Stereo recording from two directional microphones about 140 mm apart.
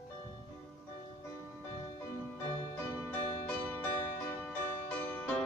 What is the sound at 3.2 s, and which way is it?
Music, 65° left (ahead or behind).